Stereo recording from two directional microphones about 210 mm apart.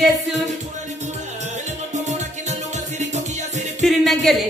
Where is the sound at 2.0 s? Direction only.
35° right (ahead or behind).